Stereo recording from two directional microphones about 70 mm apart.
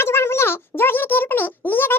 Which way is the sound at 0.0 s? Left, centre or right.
Left.